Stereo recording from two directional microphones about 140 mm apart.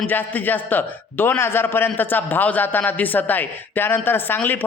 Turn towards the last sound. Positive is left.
turn(degrees=15)  # may be behind; listen again after turning